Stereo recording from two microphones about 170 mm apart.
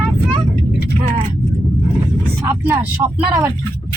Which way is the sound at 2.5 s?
15° right (ahead or behind).